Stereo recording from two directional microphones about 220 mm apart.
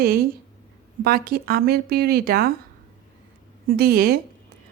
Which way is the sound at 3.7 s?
45° right (ahead or behind).